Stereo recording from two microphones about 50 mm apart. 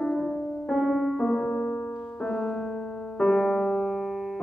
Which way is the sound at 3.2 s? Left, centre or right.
Centre.